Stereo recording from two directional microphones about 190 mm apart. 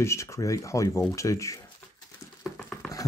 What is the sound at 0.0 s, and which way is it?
Speech, 15° left (ahead or behind).